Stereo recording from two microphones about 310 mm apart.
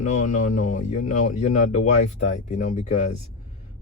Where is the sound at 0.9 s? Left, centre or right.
Left.